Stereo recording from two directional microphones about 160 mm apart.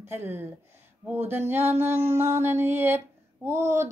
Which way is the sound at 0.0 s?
15° right (ahead or behind).